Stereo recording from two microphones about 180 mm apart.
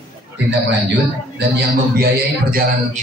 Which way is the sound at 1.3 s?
65° right (ahead or behind).